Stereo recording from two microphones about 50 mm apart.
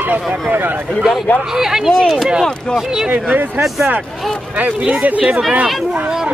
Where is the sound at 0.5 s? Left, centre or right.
Right.